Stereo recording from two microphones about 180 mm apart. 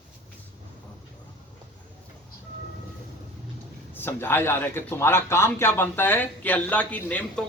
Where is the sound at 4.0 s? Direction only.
10° left (ahead or behind).